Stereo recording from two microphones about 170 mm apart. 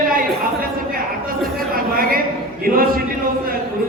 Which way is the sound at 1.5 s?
60° right (ahead or behind).